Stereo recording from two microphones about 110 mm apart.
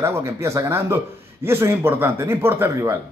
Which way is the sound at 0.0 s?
25° right (ahead or behind).